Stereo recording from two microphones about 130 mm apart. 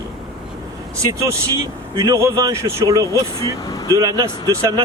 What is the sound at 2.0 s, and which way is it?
Speech, 25° right (ahead or behind).